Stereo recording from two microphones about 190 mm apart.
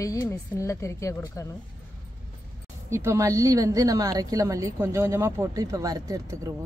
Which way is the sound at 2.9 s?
15° right (ahead or behind).